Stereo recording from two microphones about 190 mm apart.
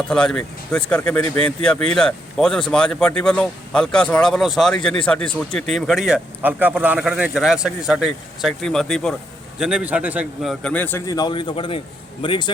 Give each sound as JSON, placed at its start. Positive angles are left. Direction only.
{"t": 0.1, "sound": "a man's voice", "side_deg": 5}